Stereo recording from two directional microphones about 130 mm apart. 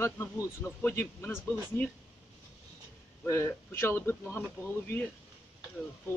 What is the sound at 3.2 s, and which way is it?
Speech, 20° left (ahead or behind).